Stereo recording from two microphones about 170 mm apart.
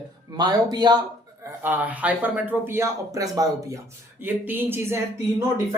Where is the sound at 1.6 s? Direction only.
10° right (ahead or behind).